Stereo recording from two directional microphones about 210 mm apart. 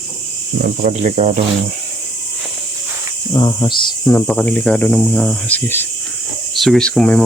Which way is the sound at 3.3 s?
20° left (ahead or behind).